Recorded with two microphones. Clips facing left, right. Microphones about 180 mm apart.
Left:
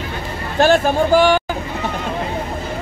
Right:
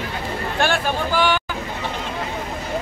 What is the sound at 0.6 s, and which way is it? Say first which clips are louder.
Speech: left 9 dB; 45° left (ahead or behind).